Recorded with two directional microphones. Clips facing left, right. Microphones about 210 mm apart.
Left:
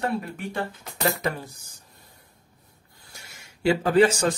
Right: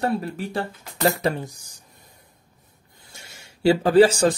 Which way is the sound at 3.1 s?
30° right (ahead or behind).